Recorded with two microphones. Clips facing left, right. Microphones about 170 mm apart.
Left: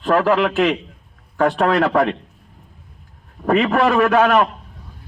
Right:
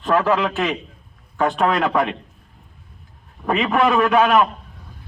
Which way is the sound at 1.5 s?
35° left (ahead or behind).